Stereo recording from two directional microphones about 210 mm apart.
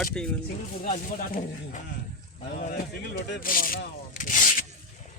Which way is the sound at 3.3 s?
40° left (ahead or behind).